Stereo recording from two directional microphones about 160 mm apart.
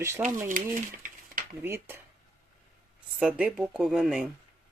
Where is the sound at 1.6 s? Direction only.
15° right (ahead or behind).